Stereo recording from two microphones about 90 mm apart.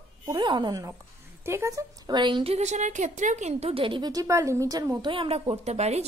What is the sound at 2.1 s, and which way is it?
Speech, 65° right (ahead or behind).